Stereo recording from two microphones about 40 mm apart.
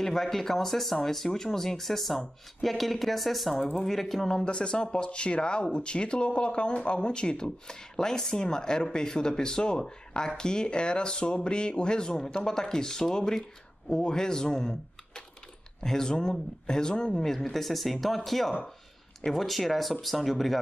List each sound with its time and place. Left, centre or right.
0.0 s speech: centre
17.2 s speech: centre